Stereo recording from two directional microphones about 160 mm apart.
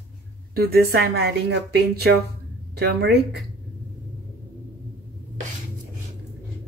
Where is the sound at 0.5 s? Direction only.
75° right (ahead or behind).